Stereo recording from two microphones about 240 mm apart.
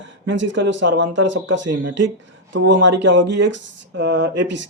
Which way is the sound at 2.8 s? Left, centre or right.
Right.